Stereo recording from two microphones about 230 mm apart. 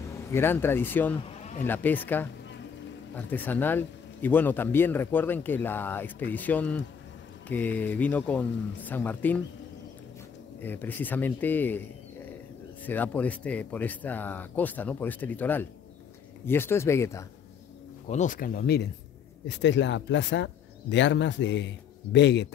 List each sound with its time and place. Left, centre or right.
0.3 s speech: centre
3.3 s speech: centre
10.6 s speech: centre
12.8 s speech: centre
18.0 s speech: left